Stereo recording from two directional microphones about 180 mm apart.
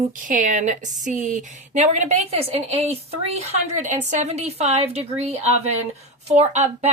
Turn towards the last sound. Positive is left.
turn(degrees=-35)  # may be behind; listen again after turning